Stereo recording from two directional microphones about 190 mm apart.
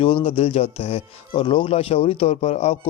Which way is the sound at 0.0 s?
25° left (ahead or behind).